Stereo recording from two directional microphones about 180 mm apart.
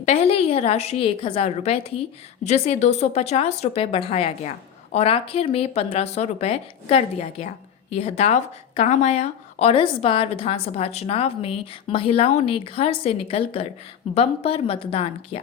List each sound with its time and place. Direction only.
0.0 s a woman's voice: 35° left (ahead or behind)